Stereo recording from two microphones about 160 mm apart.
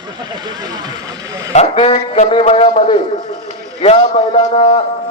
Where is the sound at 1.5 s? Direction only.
40° left (ahead or behind).